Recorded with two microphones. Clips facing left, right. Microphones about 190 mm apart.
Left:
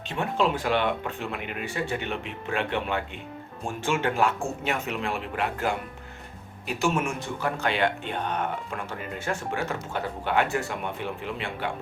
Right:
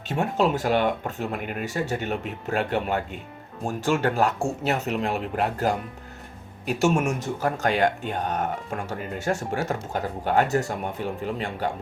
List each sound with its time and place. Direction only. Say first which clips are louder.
0.1 s speech: right 3 dB; 45° right (ahead or behind)